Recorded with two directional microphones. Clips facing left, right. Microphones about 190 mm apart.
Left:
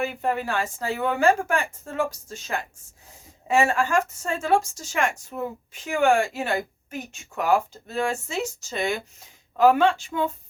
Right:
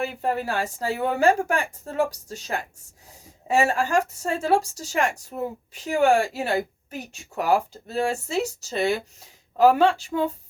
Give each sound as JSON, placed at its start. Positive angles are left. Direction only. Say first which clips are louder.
{"t": 0.0, "sound": "a woman's voice", "louder": "even", "side_deg": -35}